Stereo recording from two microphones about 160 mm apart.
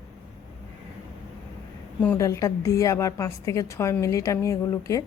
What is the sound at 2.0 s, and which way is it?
A woman's voice, 15° left (ahead or behind).